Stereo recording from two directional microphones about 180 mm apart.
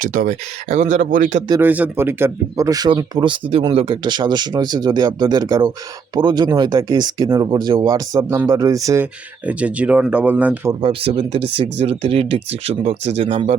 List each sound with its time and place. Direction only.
0.0 s speech: 45° right (ahead or behind)
1.6 s speech: 10° right (ahead or behind)
9.5 s speech: 5° right (ahead or behind)
10.8 s speech: 30° right (ahead or behind)